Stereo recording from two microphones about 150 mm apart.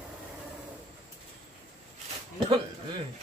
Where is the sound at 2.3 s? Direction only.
30° right (ahead or behind).